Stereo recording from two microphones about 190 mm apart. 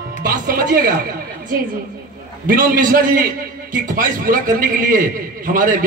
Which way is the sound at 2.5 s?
45° right (ahead or behind).